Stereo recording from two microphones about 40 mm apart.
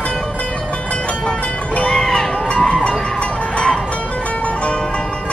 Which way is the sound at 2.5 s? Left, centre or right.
Left.